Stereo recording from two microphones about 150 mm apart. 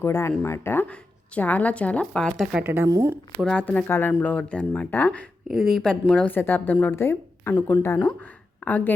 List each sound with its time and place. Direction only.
0.0 s a woman's voice: 15° left (ahead or behind); by 3.2 s 20° right (ahead or behind)
3.4 s a woman's voice: 5° left (ahead or behind)
5.5 s a woman's voice: centre (ahead or behind)